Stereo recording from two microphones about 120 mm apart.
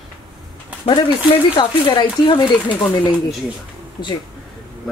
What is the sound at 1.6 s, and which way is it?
Speech, 40° left (ahead or behind).